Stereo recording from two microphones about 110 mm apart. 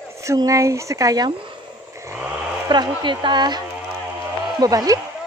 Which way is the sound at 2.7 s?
45° right (ahead or behind).